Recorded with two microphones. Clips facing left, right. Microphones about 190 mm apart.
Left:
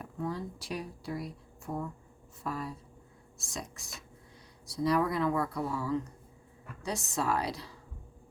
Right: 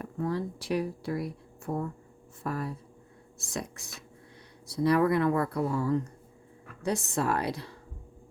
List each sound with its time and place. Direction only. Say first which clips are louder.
0.0 s speech: right 5 dB; 60° right (ahead or behind)